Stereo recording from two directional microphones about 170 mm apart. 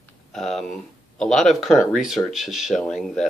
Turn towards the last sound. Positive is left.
turn(degrees=5)  # may be behind; listen again after turning